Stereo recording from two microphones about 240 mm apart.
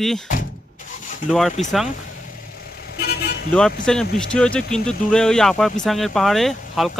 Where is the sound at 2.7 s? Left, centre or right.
Left.